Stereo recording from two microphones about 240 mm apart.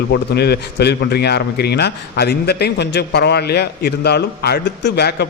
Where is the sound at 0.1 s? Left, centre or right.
Left.